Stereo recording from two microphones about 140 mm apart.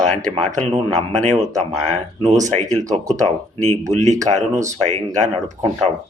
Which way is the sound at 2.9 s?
55° right (ahead or behind).